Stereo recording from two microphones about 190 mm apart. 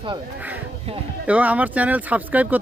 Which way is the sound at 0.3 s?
10° right (ahead or behind).